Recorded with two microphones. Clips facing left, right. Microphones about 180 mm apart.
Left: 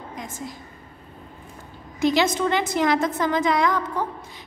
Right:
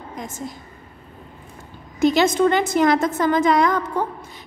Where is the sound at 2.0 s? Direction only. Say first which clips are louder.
Right 4 dB; 50° right (ahead or behind).